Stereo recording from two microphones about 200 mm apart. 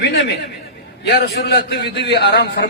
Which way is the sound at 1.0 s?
60° left (ahead or behind).